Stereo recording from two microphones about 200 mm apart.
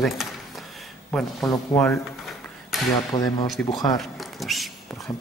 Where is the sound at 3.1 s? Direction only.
20° left (ahead or behind).